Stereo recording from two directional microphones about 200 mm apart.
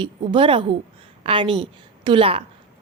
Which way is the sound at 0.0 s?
25° right (ahead or behind).